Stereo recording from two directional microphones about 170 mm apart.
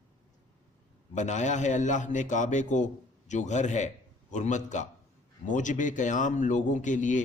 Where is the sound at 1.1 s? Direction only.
45° left (ahead or behind).